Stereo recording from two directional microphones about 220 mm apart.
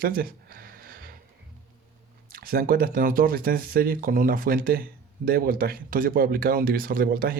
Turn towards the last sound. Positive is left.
turn(degrees=-45)  # may be behind; listen again after turning